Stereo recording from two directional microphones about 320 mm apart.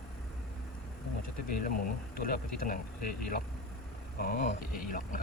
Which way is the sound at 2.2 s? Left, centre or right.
Left.